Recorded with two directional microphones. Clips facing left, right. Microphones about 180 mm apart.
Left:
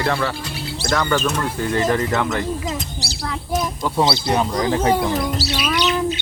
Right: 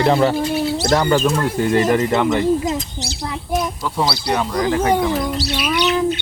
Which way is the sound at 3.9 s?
25° left (ahead or behind).